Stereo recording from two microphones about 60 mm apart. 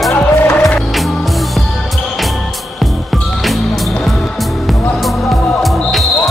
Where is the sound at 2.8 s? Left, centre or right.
Centre.